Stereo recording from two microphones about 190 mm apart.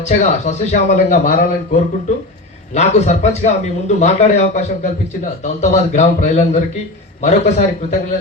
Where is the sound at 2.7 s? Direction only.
35° left (ahead or behind).